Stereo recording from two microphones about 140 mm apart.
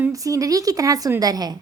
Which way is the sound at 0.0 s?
25° right (ahead or behind).